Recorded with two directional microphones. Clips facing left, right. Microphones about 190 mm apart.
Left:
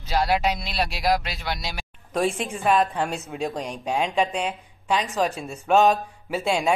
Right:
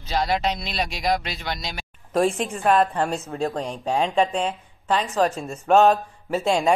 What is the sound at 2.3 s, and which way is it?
Speech, 30° right (ahead or behind).